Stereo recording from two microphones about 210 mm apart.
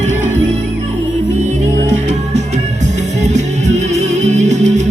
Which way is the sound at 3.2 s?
35° right (ahead or behind).